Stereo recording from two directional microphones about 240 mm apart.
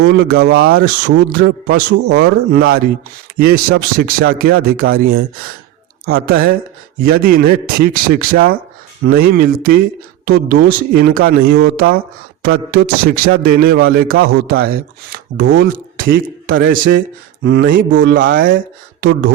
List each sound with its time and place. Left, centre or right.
0.0 s chopping: right
15.5 s a man's voice: right
17.4 s chopping: right
17.8 s speech: right
18.3 s speech: right